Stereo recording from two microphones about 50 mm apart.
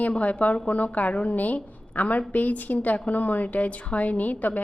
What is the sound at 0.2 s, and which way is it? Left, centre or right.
A woman's voice, left.